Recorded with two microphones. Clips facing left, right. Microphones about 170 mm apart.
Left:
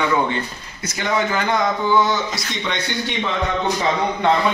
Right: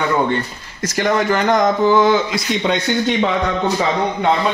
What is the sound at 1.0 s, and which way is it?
Speech, 45° right (ahead or behind).